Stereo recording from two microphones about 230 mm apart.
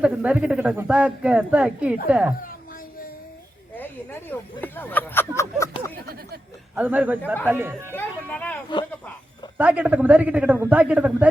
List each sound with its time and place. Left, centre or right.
0.0 s speech: centre
3.8 s speech: centre
6.0 s a sound: right
6.7 s a man's voice: centre
7.9 s a sound: centre
9.6 s a man's voice: centre